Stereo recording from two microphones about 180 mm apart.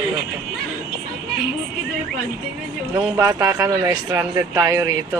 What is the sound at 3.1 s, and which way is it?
Speech, 20° right (ahead or behind).